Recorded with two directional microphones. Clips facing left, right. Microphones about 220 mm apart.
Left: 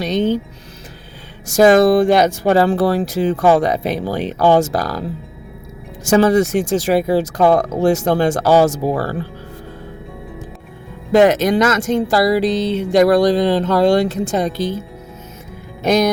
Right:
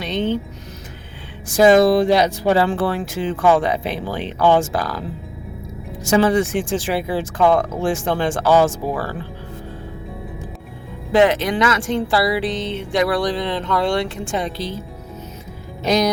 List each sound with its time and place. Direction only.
0.0 s speech: 40° left (ahead or behind)
1.5 s speech: 45° left (ahead or behind)
6.1 s speech: 40° left (ahead or behind)
11.1 s speech: 45° left (ahead or behind)
15.8 s music: 50° left (ahead or behind)